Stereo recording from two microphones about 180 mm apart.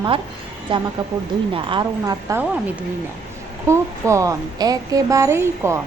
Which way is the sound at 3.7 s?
15° right (ahead or behind).